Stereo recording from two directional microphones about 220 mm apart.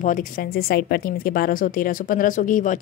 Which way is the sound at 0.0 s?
35° left (ahead or behind).